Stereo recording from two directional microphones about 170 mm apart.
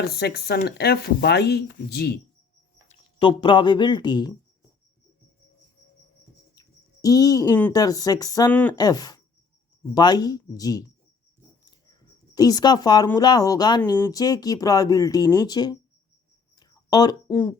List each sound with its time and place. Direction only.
0.2 s speech: 70° left (ahead or behind)
3.2 s speech: 30° left (ahead or behind)
6.6 s a sound: 20° left (ahead or behind)
7.7 s speech: 20° left (ahead or behind)
12.3 s speech: 20° left (ahead or behind)
16.6 s a sound: 25° left (ahead or behind)